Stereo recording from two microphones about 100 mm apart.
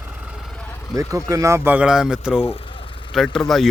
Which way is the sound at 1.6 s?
10° right (ahead or behind).